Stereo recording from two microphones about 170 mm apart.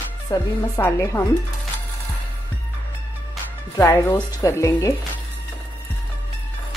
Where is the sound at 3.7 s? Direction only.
15° left (ahead or behind).